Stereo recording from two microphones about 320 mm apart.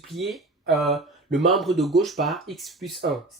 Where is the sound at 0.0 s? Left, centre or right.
Centre.